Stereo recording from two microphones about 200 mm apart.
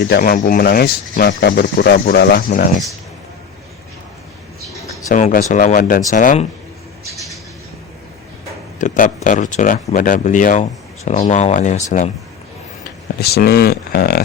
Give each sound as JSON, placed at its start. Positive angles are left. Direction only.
{"t": 0.1, "sound": "speech", "side_deg": 45}
{"t": 5.0, "sound": "speech", "side_deg": 40}
{"t": 8.8, "sound": "speech", "side_deg": 40}
{"t": 13.1, "sound": "speech", "side_deg": 50}